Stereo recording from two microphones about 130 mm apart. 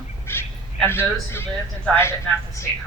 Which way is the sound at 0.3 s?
15° left (ahead or behind).